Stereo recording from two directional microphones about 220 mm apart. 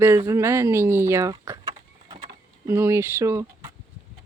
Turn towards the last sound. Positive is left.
turn(degrees=-15)  # may be behind; listen again after turning